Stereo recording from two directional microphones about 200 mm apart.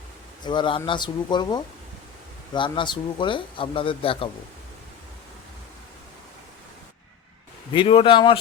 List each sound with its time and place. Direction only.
0.4 s speech: 25° left (ahead or behind)
7.7 s speech: 25° left (ahead or behind)